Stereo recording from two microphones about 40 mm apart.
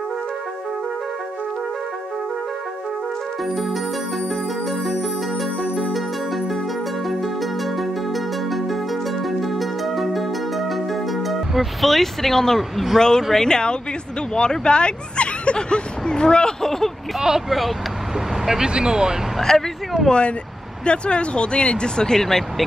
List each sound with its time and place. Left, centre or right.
3.4 s music: centre
5.4 s music: centre
13.0 s speech: centre
17.5 s speech: centre
18.3 s vehicle: centre
18.7 s speech: right
19.5 s speech: centre
20.1 s speech: left; by 22.7 s centre